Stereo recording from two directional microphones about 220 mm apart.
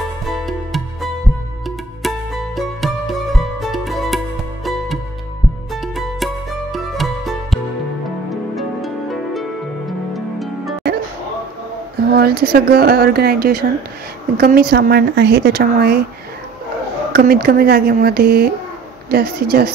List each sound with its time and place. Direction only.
2.0 s music: centre (ahead or behind)
5.8 s music: centre (ahead or behind)
12.1 s speech: 45° right (ahead or behind)
17.1 s speech: 45° right (ahead or behind)